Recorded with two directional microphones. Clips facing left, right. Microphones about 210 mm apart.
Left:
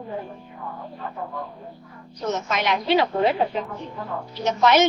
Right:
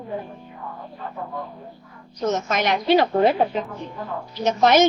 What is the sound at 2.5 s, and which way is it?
Speech, 45° right (ahead or behind).